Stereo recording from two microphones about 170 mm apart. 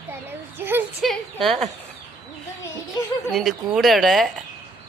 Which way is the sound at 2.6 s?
20° left (ahead or behind).